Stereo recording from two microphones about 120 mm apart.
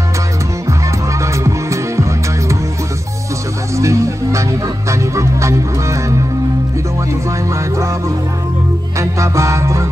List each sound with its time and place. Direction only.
1.2 s music: 25° right (ahead or behind)
3.7 s music: 25° right (ahead or behind)
8.9 s music: 25° right (ahead or behind)